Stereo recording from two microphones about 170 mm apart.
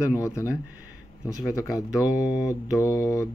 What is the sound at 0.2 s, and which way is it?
Speech, 15° left (ahead or behind).